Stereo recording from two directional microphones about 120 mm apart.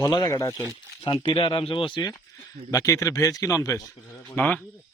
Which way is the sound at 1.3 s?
45° left (ahead or behind).